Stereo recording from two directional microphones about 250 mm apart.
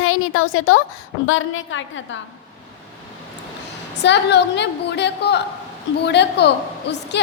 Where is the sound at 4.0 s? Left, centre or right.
Left.